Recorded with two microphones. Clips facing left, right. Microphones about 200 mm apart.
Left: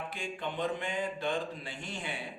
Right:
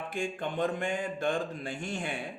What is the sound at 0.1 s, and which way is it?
Speech, 50° right (ahead or behind).